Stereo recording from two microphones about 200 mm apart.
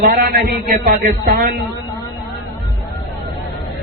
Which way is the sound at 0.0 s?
50° right (ahead or behind).